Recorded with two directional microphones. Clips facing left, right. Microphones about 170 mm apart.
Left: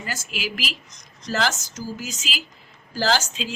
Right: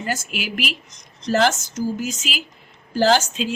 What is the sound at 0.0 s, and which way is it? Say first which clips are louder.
A woman's voice: right 4 dB; 55° right (ahead or behind).